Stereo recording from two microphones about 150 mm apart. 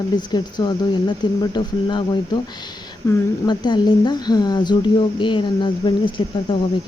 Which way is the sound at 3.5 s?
30° left (ahead or behind).